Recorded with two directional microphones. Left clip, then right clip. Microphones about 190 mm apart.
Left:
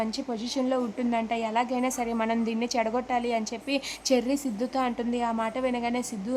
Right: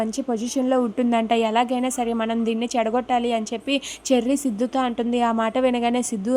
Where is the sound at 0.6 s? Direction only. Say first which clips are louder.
Right 7 dB; 25° right (ahead or behind).